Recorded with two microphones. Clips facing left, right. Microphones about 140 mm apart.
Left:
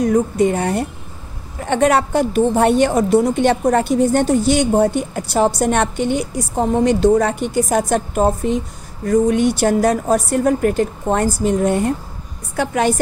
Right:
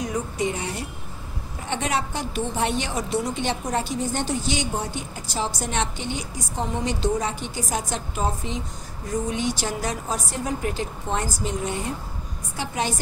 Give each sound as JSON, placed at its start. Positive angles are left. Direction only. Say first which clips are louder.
{"t": 0.0, "sound": "a woman's voice", "louder": "left 11 dB", "side_deg": 50}